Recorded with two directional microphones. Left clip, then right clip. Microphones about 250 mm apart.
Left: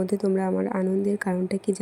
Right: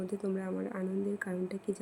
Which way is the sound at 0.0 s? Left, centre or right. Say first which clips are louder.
Left 12 dB; left.